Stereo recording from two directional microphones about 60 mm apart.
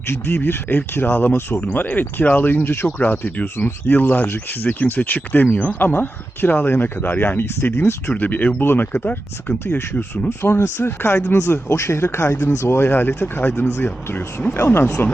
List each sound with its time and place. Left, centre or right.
0.1 s speech: left
5.9 s speech: left
8.1 s speech: left
10.2 s speech: left